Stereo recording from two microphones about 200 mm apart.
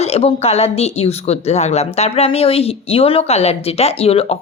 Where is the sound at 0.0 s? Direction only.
30° left (ahead or behind).